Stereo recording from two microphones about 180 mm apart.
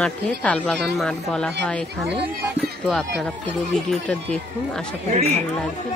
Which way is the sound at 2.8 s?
Centre (ahead or behind).